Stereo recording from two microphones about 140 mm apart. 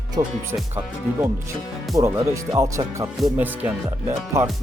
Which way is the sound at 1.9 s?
20° right (ahead or behind).